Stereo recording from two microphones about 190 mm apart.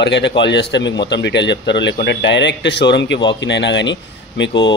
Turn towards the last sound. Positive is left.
turn(degrees=70)  # may be behind; listen again after turning